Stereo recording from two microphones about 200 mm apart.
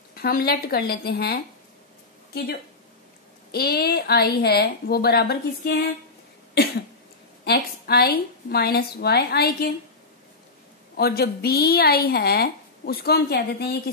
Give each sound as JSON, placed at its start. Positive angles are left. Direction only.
{"t": 0.1, "sound": "speech", "side_deg": 50}
{"t": 3.5, "sound": "speech", "side_deg": 50}
{"t": 7.4, "sound": "speech", "side_deg": 50}
{"t": 11.0, "sound": "speech", "side_deg": 50}